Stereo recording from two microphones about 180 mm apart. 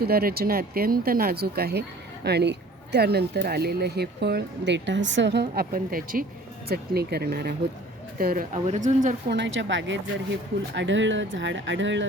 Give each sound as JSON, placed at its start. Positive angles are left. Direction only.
{"t": 0.0, "sound": "speech", "side_deg": -60}
{"t": 8.6, "sound": "speech", "side_deg": -40}
{"t": 9.2, "sound": "speech", "side_deg": -80}